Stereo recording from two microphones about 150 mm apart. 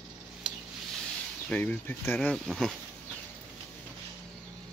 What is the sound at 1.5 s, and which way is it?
Speech, 10° left (ahead or behind).